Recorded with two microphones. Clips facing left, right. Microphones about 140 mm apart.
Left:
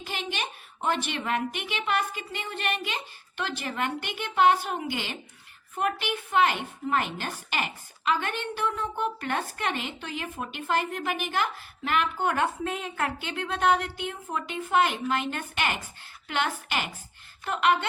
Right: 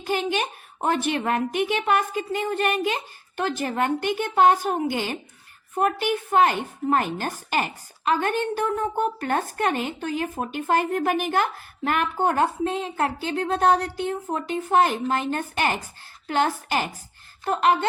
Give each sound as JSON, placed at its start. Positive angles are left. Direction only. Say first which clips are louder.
{"t": 0.0, "sound": "a woman's voice", "louder": "right 9 dB", "side_deg": -45}